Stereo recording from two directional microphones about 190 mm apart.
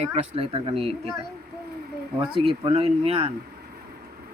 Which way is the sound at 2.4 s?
30° right (ahead or behind).